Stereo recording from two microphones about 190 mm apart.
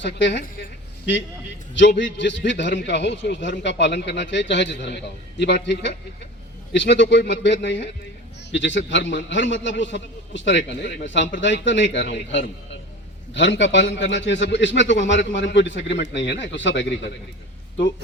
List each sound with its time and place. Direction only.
0.0 s a woman's voice: 65° left (ahead or behind)